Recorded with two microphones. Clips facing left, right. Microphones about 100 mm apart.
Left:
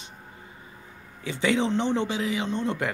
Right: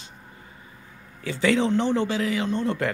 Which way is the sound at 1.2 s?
20° left (ahead or behind).